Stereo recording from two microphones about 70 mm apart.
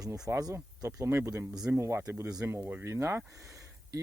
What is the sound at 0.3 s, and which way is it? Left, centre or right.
Speech, right.